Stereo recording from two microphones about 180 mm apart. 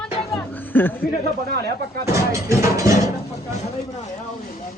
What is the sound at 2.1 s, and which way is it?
Speech, 15° right (ahead or behind).